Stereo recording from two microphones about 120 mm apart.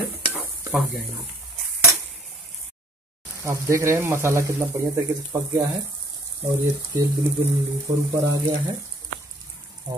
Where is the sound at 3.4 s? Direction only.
25° right (ahead or behind).